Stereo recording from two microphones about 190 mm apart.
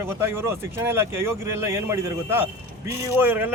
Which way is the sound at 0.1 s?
10° right (ahead or behind).